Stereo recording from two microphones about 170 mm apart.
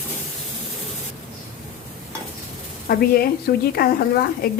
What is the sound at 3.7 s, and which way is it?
Speech, 65° left (ahead or behind).